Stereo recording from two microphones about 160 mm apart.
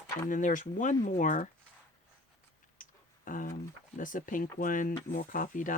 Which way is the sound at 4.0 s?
55° left (ahead or behind).